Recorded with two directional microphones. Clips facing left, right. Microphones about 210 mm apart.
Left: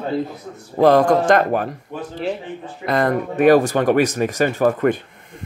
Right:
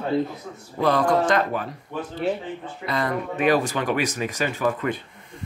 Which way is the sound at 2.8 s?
50° left (ahead or behind).